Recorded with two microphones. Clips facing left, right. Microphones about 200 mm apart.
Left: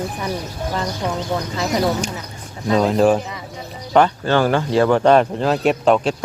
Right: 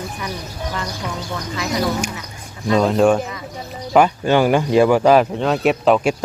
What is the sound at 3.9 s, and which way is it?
Speech, 10° right (ahead or behind).